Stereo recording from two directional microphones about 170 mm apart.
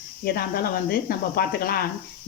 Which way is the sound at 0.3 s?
65° left (ahead or behind).